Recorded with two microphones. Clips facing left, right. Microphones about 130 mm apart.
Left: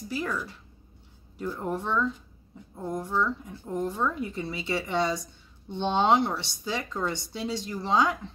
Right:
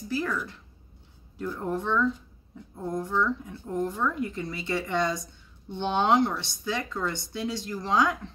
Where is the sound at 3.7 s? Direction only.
20° left (ahead or behind).